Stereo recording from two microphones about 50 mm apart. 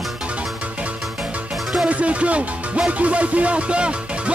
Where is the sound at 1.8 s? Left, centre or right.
Right.